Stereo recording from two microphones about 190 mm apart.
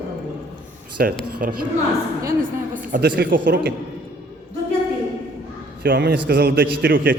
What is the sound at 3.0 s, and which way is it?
Speech, 55° right (ahead or behind).